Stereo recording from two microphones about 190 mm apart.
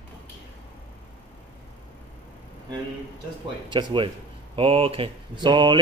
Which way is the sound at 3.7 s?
25° right (ahead or behind).